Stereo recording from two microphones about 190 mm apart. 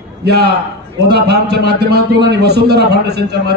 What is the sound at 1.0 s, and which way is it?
A man's voice, 60° right (ahead or behind).